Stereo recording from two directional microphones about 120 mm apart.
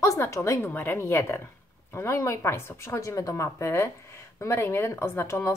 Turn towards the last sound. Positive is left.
turn(degrees=20)  # may be behind; listen again after turning